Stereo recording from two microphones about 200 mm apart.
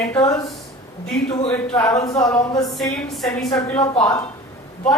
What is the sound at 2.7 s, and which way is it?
Speech, centre (ahead or behind).